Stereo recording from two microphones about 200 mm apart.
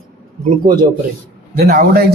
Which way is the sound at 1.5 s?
50° right (ahead or behind).